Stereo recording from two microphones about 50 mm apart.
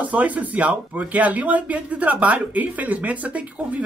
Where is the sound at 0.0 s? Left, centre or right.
Right.